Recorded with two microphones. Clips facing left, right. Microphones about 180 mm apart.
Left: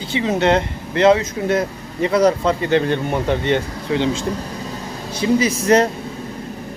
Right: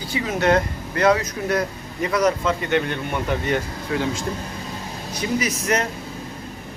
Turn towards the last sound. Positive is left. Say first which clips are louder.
# left 8 dB
turn(degrees=30)  # may be behind; listen again after turning